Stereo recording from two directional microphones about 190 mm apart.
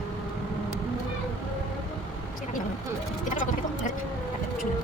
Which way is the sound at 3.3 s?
45° left (ahead or behind).